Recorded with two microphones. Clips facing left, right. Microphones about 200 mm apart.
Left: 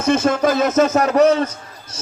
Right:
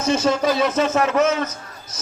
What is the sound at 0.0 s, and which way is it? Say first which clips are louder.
A man's voice: left 3 dB; 55° left (ahead or behind).